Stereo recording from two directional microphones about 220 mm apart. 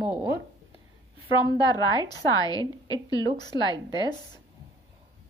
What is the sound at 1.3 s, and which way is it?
A woman's voice, 20° left (ahead or behind).